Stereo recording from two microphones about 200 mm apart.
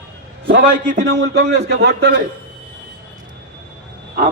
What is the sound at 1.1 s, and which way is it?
Speech, 55° right (ahead or behind).